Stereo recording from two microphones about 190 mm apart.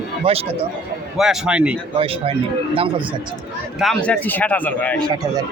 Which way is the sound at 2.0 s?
30° right (ahead or behind).